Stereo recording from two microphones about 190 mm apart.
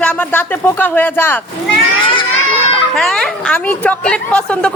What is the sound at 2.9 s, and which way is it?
A woman's voice, centre (ahead or behind).